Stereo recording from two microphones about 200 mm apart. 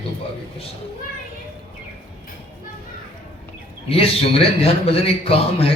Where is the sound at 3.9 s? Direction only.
30° left (ahead or behind).